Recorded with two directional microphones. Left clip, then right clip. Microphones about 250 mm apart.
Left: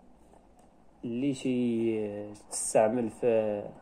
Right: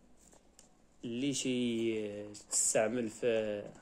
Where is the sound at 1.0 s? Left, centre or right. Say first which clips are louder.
Left 4 dB; centre.